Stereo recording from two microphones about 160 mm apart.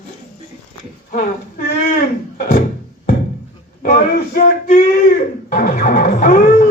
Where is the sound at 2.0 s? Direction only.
60° left (ahead or behind).